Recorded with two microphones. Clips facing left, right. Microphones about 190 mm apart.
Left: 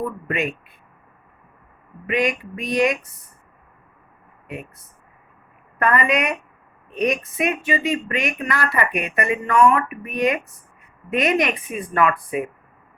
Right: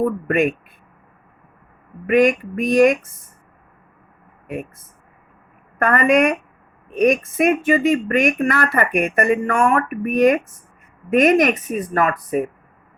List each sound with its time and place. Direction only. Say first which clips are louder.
0.0 s speech: right 7 dB; 50° right (ahead or behind)
2.0 s speech: right 7 dB; 50° right (ahead or behind)
4.4 s a woman's voice: right 6 dB; 50° right (ahead or behind)